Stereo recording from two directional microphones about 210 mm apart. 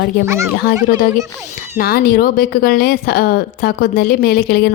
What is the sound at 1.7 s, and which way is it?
Speech, 45° left (ahead or behind).